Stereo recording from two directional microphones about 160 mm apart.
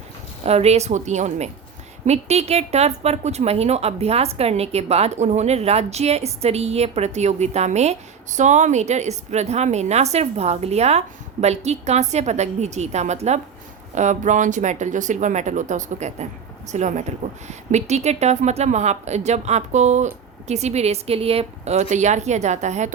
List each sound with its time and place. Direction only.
0.4 s a woman's voice: 40° right (ahead or behind)